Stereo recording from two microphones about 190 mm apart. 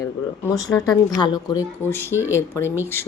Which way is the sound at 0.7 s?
5° left (ahead or behind).